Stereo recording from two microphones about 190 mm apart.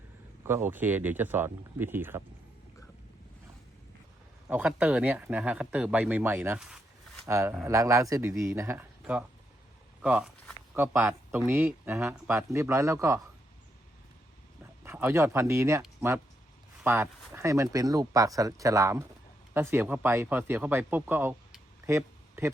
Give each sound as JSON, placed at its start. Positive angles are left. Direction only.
{"t": 0.4, "sound": "speech", "side_deg": -10}
{"t": 4.4, "sound": "speech", "side_deg": -10}
{"t": 7.3, "sound": "speech", "side_deg": -15}
{"t": 14.8, "sound": "speech", "side_deg": -15}